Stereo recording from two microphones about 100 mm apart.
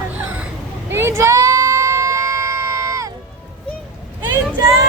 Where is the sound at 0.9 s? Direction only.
25° right (ahead or behind).